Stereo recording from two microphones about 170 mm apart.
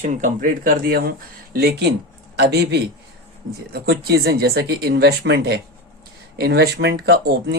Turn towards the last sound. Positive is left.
turn(degrees=-80)